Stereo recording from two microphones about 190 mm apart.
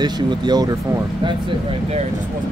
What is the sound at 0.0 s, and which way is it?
Speech, 20° right (ahead or behind).